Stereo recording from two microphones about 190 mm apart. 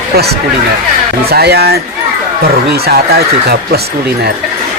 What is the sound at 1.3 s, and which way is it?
Speech, 55° right (ahead or behind).